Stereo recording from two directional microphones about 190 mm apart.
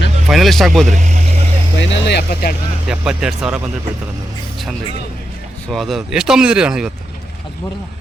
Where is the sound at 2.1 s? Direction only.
60° left (ahead or behind).